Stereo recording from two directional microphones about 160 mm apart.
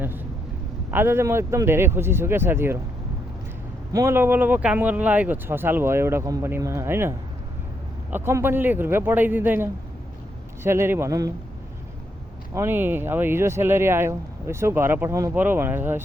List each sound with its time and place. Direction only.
0.9 s speech: 15° right (ahead or behind)
3.9 s speech: 15° right (ahead or behind)
8.1 s speech: 15° right (ahead or behind)
12.5 s speech: 15° right (ahead or behind)